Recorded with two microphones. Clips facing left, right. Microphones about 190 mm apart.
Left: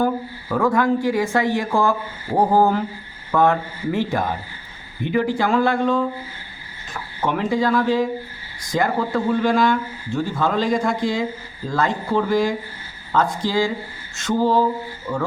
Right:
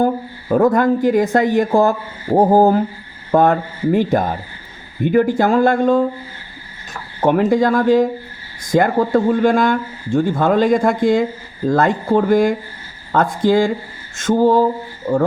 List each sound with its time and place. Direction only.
0.0 s speech: 40° right (ahead or behind)
2.5 s a sound: 40° right (ahead or behind)
3.3 s speech: 50° right (ahead or behind)
7.2 s speech: 50° right (ahead or behind)